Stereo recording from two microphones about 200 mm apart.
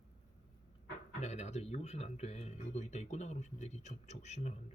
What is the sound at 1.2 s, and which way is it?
Speech, 35° left (ahead or behind).